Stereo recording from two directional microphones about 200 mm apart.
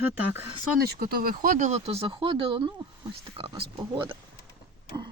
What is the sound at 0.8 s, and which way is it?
Speech, 45° right (ahead or behind).